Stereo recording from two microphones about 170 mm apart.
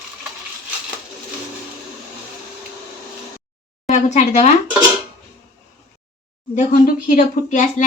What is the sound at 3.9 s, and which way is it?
Speech, 45° left (ahead or behind).